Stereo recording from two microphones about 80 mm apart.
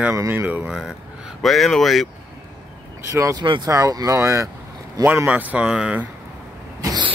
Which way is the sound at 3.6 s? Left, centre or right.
Right.